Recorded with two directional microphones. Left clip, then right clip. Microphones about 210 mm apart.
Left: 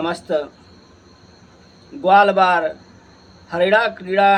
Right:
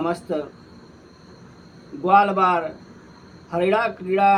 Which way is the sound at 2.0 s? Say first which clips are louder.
Left 4 dB; 10° left (ahead or behind).